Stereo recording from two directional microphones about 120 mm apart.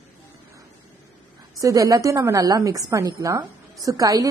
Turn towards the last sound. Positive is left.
turn(degrees=-30)  # may be behind; listen again after turning